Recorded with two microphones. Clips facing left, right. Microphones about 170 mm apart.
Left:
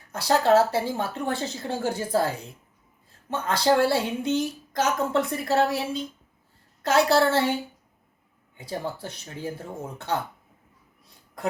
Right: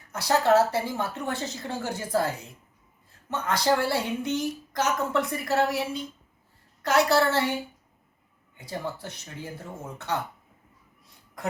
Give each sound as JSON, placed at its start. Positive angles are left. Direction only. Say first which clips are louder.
{"t": 0.1, "sound": "a woman's voice", "louder": "left 2 dB", "side_deg": 30}
{"t": 8.5, "sound": "speech", "louder": "left 2 dB", "side_deg": 30}